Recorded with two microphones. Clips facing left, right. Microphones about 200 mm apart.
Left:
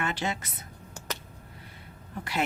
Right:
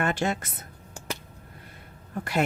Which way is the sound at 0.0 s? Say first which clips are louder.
Right 5 dB; 50° right (ahead or behind).